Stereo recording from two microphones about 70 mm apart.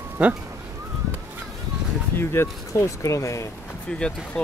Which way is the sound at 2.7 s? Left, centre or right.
Left.